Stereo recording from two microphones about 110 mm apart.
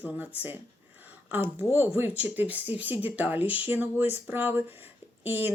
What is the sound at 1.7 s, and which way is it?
Speech, 20° right (ahead or behind).